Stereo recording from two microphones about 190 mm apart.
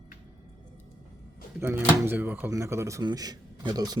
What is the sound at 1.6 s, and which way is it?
Speech, 10° right (ahead or behind).